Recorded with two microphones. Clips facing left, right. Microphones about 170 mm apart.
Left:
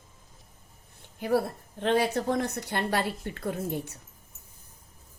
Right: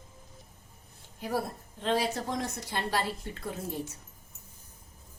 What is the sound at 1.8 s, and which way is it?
A woman's voice, 60° left (ahead or behind).